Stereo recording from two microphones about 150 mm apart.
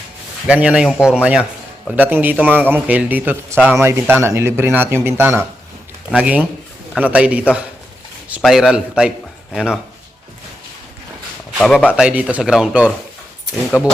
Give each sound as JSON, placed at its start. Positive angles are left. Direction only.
{"t": 0.4, "sound": "a man's voice", "side_deg": -10}
{"t": 11.6, "sound": "speech", "side_deg": 5}
{"t": 11.9, "sound": "speech", "side_deg": -10}